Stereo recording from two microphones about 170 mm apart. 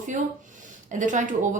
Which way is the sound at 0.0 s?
50° right (ahead or behind).